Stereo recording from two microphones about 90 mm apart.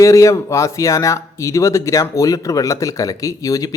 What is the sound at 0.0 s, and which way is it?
Speech, 35° left (ahead or behind).